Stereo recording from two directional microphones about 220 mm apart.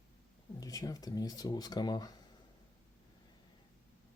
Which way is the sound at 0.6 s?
15° left (ahead or behind).